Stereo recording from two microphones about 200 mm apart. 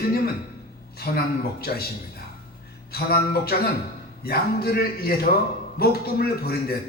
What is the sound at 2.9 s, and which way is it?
A man's voice, 50° left (ahead or behind).